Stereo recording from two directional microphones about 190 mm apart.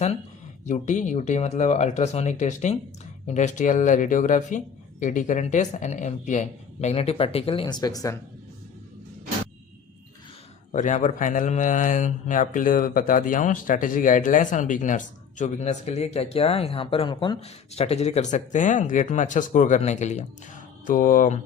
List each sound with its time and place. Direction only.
0.6 s speech: 40° left (ahead or behind); by 8.2 s 20° left (ahead or behind)
10.7 s speech: 40° left (ahead or behind)